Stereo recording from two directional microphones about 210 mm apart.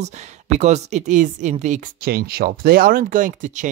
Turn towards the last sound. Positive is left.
turn(degrees=-35)  # may be behind; listen again after turning